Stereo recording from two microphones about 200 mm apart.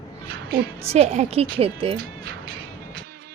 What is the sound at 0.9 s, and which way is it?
A woman's voice, 35° right (ahead or behind).